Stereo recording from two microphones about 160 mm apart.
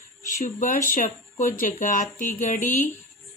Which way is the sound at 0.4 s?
55° left (ahead or behind).